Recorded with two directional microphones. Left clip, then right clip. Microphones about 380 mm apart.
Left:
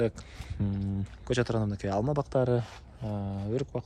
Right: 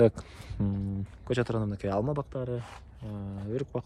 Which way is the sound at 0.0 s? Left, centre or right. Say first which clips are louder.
Right 7 dB; centre.